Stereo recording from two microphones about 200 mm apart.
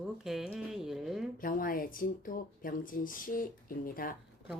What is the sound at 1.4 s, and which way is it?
Speech, 45° left (ahead or behind).